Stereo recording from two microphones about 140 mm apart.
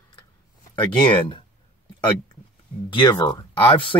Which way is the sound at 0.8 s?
35° left (ahead or behind).